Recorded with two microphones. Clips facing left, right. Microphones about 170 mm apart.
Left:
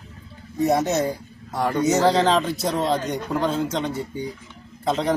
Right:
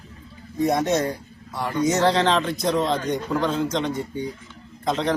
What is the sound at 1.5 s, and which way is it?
Speech, 45° left (ahead or behind).